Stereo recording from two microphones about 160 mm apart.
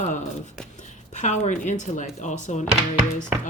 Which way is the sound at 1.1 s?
50° left (ahead or behind).